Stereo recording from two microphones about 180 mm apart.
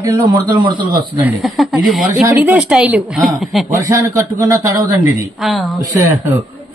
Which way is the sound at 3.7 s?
20° right (ahead or behind).